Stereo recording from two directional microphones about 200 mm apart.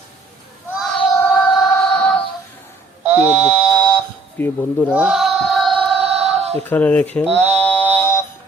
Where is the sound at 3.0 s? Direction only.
10° right (ahead or behind).